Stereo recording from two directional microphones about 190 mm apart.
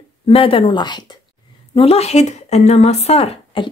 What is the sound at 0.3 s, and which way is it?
A woman's voice, 30° left (ahead or behind).